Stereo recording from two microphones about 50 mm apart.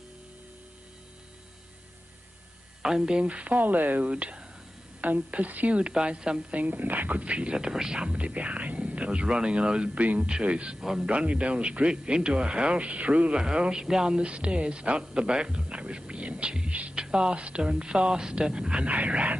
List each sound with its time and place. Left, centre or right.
2.8 s speech: centre; by 4.1 s right
4.1 s speech: right
5.0 s speech: right
6.5 s speech: right; by 11.1 s centre
11.1 s speech: right